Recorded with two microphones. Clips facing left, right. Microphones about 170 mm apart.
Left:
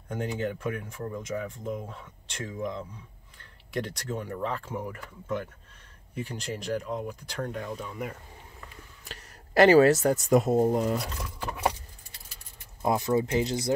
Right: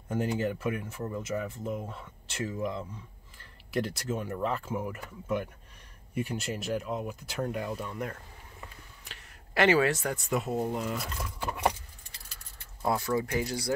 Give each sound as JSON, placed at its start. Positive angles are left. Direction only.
{"t": 0.1, "sound": "speech", "side_deg": -5}
{"t": 9.1, "sound": "speech", "side_deg": 40}
{"t": 11.0, "sound": "speech", "side_deg": 0}
{"t": 12.8, "sound": "speech", "side_deg": 20}